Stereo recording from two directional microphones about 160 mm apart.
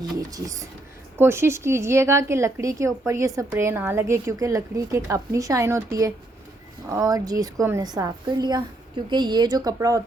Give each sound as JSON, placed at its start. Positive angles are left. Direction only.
{"t": 0.0, "sound": "a woman's voice", "side_deg": -20}